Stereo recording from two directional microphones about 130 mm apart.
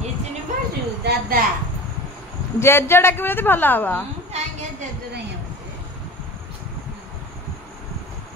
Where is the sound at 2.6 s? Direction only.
20° left (ahead or behind).